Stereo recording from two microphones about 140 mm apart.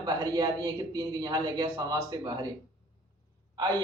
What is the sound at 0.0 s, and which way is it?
A man's voice, 30° right (ahead or behind).